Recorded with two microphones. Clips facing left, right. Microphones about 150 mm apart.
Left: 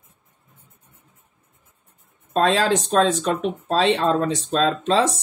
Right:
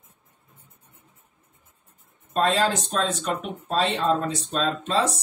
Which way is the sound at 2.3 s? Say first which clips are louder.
Left 3 dB; 90° left.